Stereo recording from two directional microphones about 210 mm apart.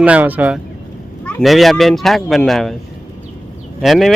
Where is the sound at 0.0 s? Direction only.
5° right (ahead or behind).